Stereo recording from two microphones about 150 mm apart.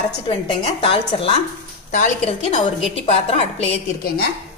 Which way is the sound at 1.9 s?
55° left (ahead or behind).